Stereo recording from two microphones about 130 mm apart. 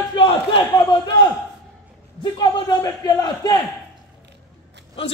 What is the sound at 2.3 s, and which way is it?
Speech, 30° left (ahead or behind).